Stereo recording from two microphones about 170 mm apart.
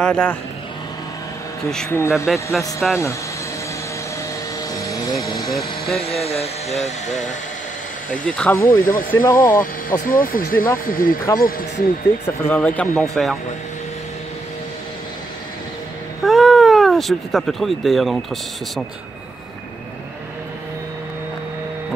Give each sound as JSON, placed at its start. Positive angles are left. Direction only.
{"t": 0.0, "sound": "speech", "side_deg": 5}
{"t": 1.7, "sound": "speech", "side_deg": 5}
{"t": 2.0, "sound": "speech", "side_deg": 15}
{"t": 2.2, "sound": "speech", "side_deg": 0}
{"t": 4.7, "sound": "a sound", "side_deg": 20}
{"t": 5.5, "sound": "speech", "side_deg": 0}
{"t": 6.0, "sound": "speech", "side_deg": 35}
{"t": 6.7, "sound": "speech", "side_deg": 0}
{"t": 8.6, "sound": "speech", "side_deg": 55}
{"t": 9.1, "sound": "speech", "side_deg": 15}
{"t": 9.6, "sound": "speech", "side_deg": 55}
{"t": 12.4, "sound": "speech", "side_deg": 10}
{"t": 16.3, "sound": "speech", "side_deg": 0}